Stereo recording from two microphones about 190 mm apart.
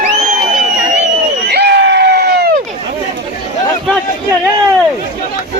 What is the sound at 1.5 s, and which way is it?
Crowd, 60° right (ahead or behind).